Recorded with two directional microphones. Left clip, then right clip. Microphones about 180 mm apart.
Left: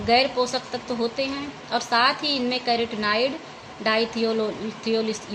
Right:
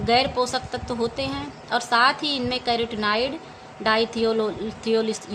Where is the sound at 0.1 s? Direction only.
20° right (ahead or behind).